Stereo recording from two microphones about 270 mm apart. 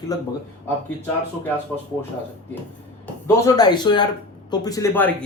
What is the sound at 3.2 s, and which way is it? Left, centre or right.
A man's voice, centre.